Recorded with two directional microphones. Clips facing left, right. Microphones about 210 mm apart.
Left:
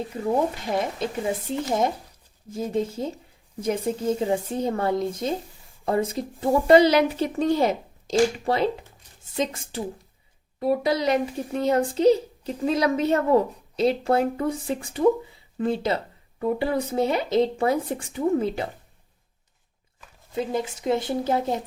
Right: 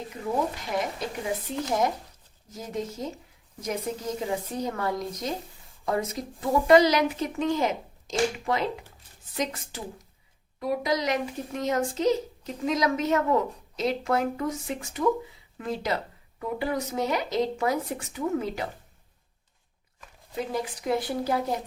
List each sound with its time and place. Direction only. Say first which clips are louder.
0.9 s speech: left 4 dB; 30° left (ahead or behind)
20.3 s speech: left 4 dB; 25° left (ahead or behind)